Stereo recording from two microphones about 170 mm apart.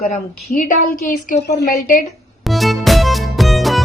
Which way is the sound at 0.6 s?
50° left (ahead or behind).